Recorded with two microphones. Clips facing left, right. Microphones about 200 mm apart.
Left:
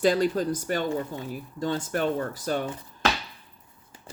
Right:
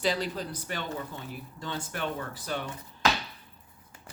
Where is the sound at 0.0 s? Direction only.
50° left (ahead or behind).